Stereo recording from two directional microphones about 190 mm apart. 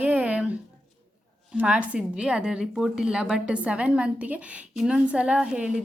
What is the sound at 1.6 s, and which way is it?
A woman's voice, 5° right (ahead or behind).